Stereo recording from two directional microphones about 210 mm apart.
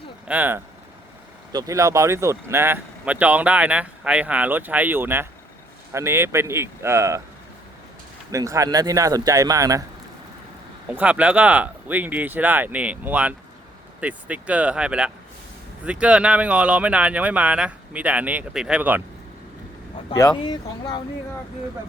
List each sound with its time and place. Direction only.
0.3 s speech: 10° right (ahead or behind)
8.3 s speech: 15° right (ahead or behind)
10.8 s speech: 5° right (ahead or behind)
20.1 s speech: 15° left (ahead or behind)